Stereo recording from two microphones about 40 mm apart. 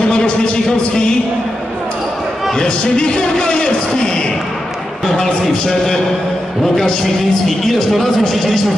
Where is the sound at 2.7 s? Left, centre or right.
Left.